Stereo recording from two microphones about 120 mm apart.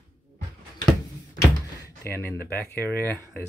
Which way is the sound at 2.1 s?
20° left (ahead or behind).